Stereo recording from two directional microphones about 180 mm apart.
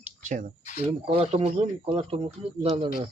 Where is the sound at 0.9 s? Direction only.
30° right (ahead or behind).